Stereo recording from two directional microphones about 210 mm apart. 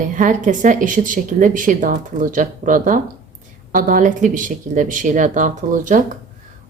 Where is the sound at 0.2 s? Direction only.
40° right (ahead or behind).